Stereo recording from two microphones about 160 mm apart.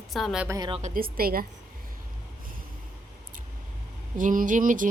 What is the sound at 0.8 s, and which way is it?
Speech, 65° right (ahead or behind).